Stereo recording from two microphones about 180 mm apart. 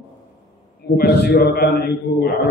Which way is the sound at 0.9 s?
60° left (ahead or behind).